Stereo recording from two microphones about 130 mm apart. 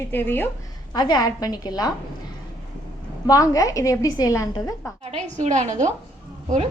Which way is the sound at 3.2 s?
25° left (ahead or behind).